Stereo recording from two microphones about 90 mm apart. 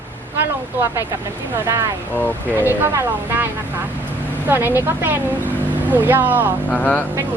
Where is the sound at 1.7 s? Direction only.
35° right (ahead or behind); by 6.5 s 20° right (ahead or behind).